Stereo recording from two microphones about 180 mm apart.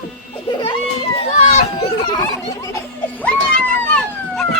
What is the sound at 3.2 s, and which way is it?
Cat, 5° left (ahead or behind).